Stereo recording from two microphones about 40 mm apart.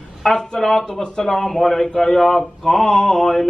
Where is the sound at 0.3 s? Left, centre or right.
Centre.